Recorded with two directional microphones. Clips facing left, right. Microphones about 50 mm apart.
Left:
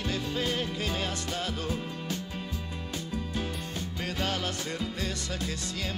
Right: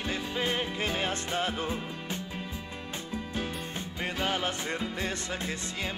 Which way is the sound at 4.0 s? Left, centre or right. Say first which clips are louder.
Right 2 dB; right.